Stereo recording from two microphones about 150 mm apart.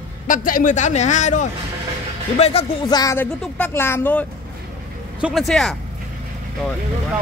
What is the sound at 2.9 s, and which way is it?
Speech, 25° left (ahead or behind).